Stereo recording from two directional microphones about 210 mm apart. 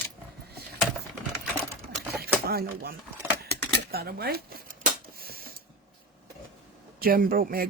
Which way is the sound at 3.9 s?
50° right (ahead or behind).